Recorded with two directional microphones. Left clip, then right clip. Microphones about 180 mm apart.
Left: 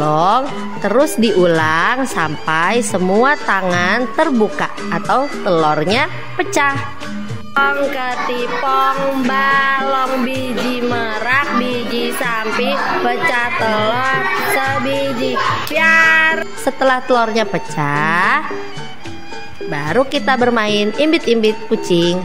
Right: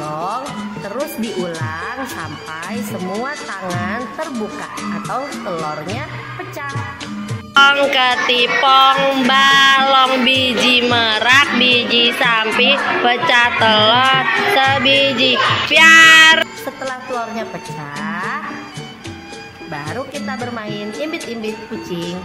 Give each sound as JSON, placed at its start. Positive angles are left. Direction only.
{"t": 0.0, "sound": "music", "side_deg": 40}
{"t": 1.5, "sound": "a woman's voice", "side_deg": 50}
{"t": 3.1, "sound": "a woman's voice", "side_deg": 35}
{"t": 5.0, "sound": "speech", "side_deg": 35}
{"t": 7.5, "sound": "music", "side_deg": 5}
{"t": 9.8, "sound": "music", "side_deg": 15}
{"t": 16.6, "sound": "a woman's voice", "side_deg": 35}
{"t": 19.7, "sound": "a woman's voice", "side_deg": 40}